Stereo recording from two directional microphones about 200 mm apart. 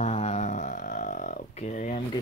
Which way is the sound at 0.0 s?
35° left (ahead or behind).